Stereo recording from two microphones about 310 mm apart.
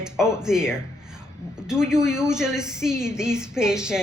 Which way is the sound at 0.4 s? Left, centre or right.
Centre.